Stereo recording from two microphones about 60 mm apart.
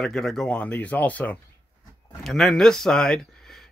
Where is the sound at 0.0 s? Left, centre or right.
Centre.